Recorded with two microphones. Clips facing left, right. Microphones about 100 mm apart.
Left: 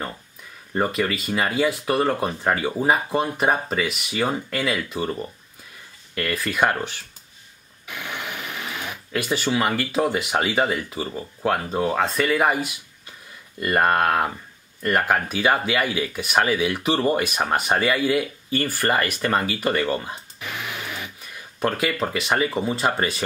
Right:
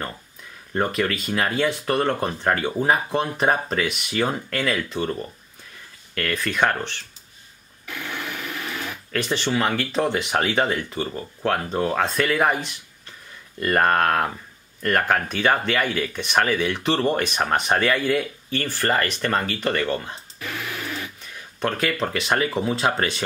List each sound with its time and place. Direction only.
0.7 s speech: 5° left (ahead or behind)
6.1 s speech: 5° left (ahead or behind)
7.8 s speech: 15° left (ahead or behind)
20.3 s music: 20° left (ahead or behind)
21.2 s speech: 5° left (ahead or behind)